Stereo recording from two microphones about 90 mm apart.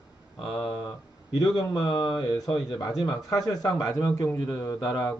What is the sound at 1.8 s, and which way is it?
Speech, 55° left (ahead or behind).